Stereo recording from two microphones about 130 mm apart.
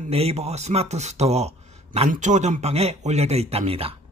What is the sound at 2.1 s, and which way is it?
Speech, 65° right (ahead or behind).